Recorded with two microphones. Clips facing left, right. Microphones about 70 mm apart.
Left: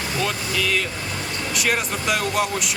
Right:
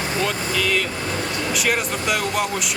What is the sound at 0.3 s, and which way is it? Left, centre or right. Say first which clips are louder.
Speech: right 2 dB; centre.